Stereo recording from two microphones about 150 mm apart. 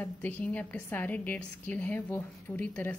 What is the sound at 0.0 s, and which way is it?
A woman's voice, 10° left (ahead or behind).